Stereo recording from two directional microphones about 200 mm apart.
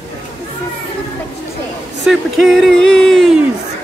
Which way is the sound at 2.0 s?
Centre (ahead or behind).